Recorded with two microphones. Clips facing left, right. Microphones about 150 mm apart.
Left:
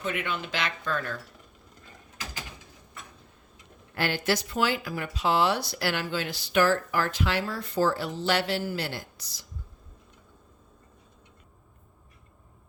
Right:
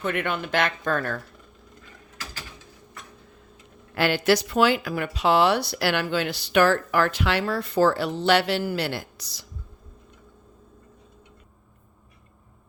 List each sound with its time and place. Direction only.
0.0 s speech: 55° right (ahead or behind)
3.9 s speech: 90° right